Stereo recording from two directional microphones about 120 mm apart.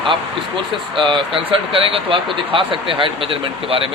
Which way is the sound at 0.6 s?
45° right (ahead or behind).